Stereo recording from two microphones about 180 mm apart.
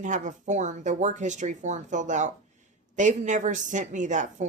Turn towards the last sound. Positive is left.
turn(degrees=-40)  # may be behind; listen again after turning